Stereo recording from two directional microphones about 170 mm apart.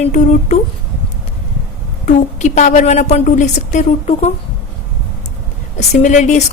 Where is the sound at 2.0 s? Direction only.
45° left (ahead or behind).